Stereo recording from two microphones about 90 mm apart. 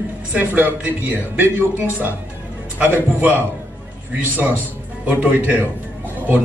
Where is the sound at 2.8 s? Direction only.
20° right (ahead or behind).